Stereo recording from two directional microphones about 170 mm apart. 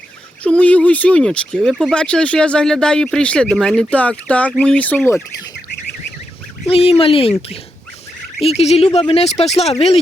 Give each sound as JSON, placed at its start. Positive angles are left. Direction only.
{"t": 0.4, "sound": "speech", "side_deg": 10}
{"t": 6.7, "sound": "speech", "side_deg": 35}